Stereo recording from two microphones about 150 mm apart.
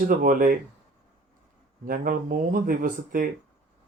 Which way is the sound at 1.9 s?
70° right (ahead or behind).